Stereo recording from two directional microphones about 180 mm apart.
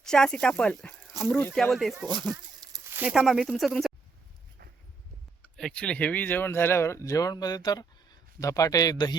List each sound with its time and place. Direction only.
0.0 s speech: 5° left (ahead or behind)
2.3 s a sound: 20° right (ahead or behind)
3.0 s speech: 5° right (ahead or behind)
5.4 s speech: 5° left (ahead or behind); by 9.1 s 20° left (ahead or behind)